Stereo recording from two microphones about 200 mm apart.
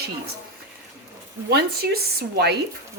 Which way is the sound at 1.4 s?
55° right (ahead or behind).